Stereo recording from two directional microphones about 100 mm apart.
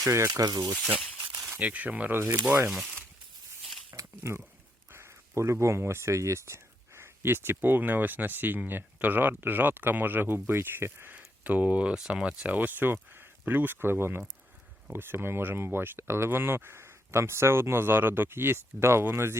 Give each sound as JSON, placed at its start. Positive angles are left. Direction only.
{"t": 0.0, "sound": "speech", "side_deg": -35}
{"t": 1.5, "sound": "speech", "side_deg": -15}
{"t": 3.9, "sound": "a sound", "side_deg": -30}
{"t": 4.9, "sound": "speech", "side_deg": -25}